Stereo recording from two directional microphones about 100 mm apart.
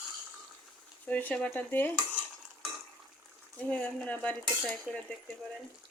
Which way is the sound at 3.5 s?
15° left (ahead or behind).